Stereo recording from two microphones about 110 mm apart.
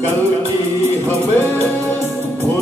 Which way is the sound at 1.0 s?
20° left (ahead or behind).